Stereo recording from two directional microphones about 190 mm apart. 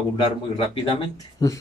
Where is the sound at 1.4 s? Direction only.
20° left (ahead or behind).